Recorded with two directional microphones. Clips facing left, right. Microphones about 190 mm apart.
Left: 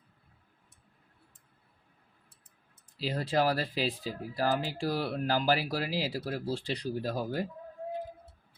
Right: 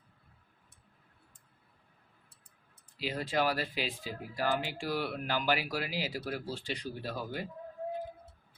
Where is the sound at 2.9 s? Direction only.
35° left (ahead or behind).